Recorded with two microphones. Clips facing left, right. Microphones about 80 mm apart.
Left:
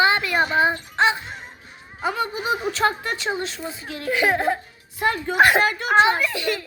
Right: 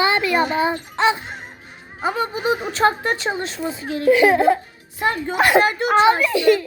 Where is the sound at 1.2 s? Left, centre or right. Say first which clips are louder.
Right 2 dB; right.